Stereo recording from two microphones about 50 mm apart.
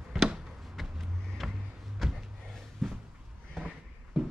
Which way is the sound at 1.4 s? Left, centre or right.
Centre.